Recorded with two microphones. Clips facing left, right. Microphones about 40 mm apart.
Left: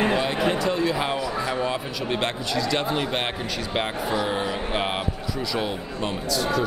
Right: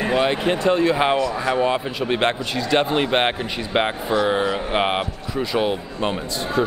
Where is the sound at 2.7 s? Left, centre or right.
Right.